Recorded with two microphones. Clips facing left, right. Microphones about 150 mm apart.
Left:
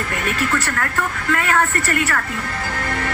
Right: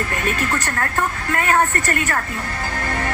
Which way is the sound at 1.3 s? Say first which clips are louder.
Even; 40° right (ahead or behind).